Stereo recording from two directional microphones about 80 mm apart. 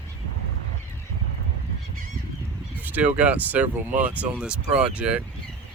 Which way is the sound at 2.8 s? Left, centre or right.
Right.